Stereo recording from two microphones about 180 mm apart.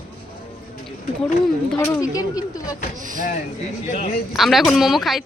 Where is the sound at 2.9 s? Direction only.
45° right (ahead or behind).